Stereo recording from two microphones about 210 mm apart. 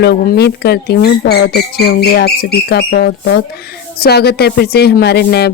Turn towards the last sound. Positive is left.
turn(degrees=50)  # may be behind; listen again after turning